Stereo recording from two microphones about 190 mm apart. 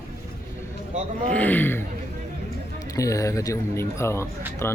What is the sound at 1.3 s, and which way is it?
Speech, 10° left (ahead or behind).